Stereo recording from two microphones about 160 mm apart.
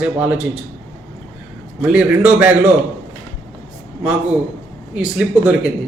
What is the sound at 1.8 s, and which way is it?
Speech, 10° right (ahead or behind).